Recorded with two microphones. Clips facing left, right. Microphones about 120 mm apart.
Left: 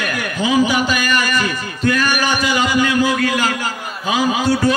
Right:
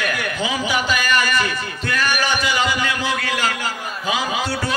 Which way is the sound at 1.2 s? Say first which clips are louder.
Left 1 dB; 45° left (ahead or behind).